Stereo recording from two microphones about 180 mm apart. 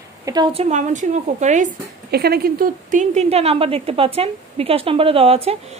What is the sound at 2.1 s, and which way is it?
A woman's voice, 60° right (ahead or behind).